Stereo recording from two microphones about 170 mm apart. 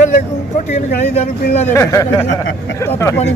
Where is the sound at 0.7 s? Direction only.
40° left (ahead or behind).